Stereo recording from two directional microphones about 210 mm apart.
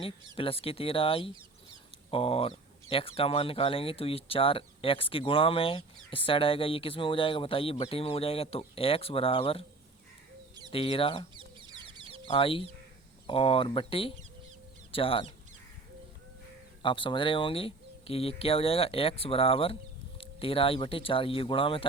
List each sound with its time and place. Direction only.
0.3 s speech: 25° left (ahead or behind)
10.7 s speech: 25° left (ahead or behind)
11.3 s a sound: 25° right (ahead or behind)
12.3 s speech: 25° left (ahead or behind)
16.8 s speech: 25° left (ahead or behind)